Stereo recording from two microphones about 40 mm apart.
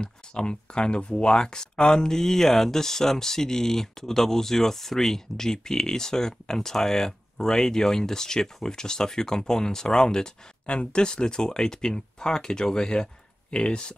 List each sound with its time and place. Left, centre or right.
0.0 s speech: left
10.7 s speech: left